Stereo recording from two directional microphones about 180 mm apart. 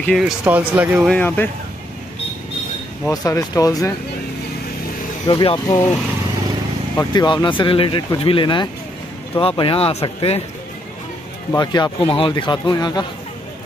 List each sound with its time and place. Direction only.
0.0 s speech: centre (ahead or behind)
1.1 s speech: 10° left (ahead or behind)
3.1 s speech: 20° left (ahead or behind)
5.2 s speech: 25° left (ahead or behind)
7.0 s speech: 20° left (ahead or behind)
11.5 s speech: 20° left (ahead or behind)